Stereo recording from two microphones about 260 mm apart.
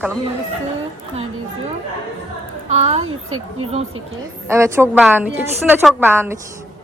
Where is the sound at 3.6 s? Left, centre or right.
Right.